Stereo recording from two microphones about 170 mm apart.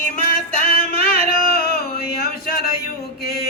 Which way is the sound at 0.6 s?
60° left (ahead or behind).